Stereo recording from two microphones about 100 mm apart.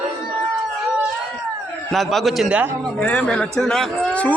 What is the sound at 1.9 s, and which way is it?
Speech, centre (ahead or behind).